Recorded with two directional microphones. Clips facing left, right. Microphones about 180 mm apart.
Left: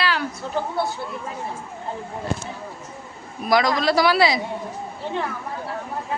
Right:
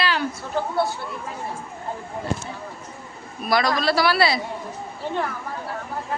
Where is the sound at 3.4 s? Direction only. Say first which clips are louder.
Left 2 dB; 15° left (ahead or behind).